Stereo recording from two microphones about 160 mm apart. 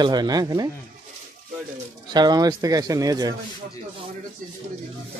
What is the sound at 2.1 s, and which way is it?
A man's voice, 25° right (ahead or behind).